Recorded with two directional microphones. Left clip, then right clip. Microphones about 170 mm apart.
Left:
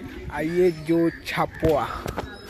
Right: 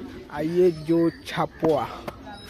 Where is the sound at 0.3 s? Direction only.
5° right (ahead or behind).